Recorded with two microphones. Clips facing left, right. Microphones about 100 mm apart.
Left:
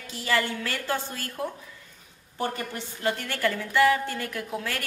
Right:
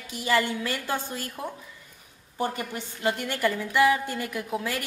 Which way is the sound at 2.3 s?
15° right (ahead or behind).